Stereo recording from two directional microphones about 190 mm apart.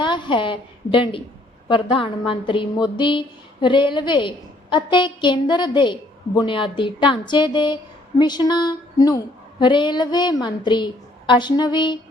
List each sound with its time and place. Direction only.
0.0 s a woman's voice: 25° left (ahead or behind)